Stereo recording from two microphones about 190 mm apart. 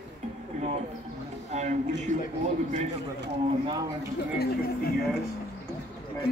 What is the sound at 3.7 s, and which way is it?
Speech, 20° right (ahead or behind).